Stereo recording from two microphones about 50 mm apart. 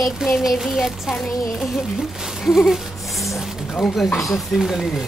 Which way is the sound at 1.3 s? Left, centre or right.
Centre.